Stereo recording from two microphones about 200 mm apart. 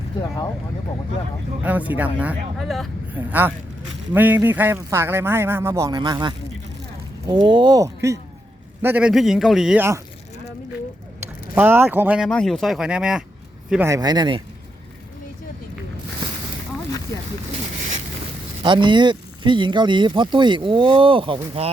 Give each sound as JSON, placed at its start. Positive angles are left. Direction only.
{"t": 1.6, "sound": "a man's voice", "side_deg": -10}
{"t": 11.5, "sound": "a man's voice", "side_deg": -10}
{"t": 18.6, "sound": "speech", "side_deg": -25}